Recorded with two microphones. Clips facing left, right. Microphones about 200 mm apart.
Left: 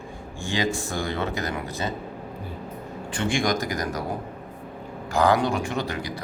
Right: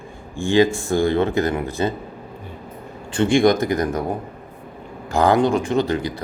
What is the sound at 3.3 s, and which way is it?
Speech, 55° right (ahead or behind).